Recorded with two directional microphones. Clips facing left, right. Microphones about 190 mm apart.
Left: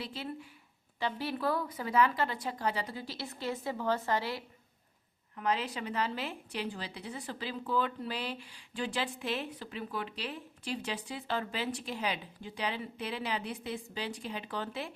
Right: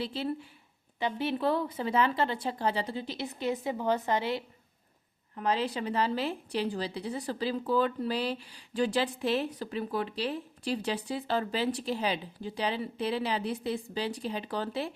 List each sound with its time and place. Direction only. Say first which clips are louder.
0.0 s speech: right 7 dB; 30° right (ahead or behind)
5.3 s a woman's voice: right 3 dB; 35° right (ahead or behind)